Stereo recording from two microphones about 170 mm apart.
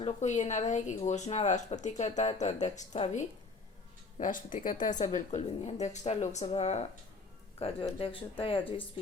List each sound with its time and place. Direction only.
0.0 s speech: 40° left (ahead or behind)